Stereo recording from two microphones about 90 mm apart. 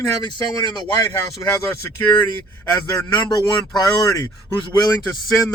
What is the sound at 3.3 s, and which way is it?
Speech, 55° left (ahead or behind).